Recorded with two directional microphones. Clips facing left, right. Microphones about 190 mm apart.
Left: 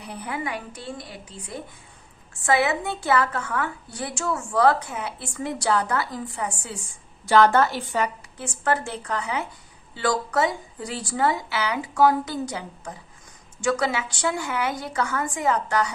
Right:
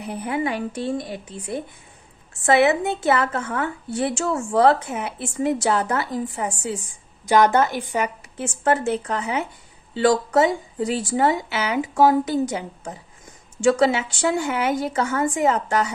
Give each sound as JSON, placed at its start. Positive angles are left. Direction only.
{"t": 0.0, "sound": "a woman's voice", "side_deg": -20}
{"t": 2.5, "sound": "a woman's voice", "side_deg": -20}